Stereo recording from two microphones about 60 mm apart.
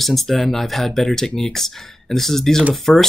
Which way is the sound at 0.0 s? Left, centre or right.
Centre.